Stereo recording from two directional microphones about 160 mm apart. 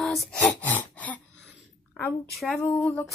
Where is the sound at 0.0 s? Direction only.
Centre (ahead or behind).